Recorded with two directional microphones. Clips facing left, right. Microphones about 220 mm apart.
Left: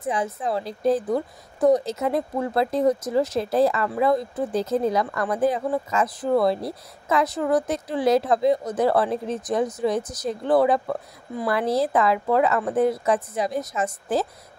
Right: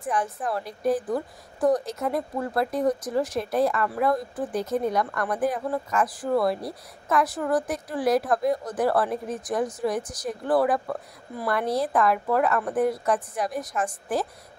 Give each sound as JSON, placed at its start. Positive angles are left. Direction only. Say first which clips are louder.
{"t": 0.0, "sound": "speech", "louder": "left 2 dB", "side_deg": 25}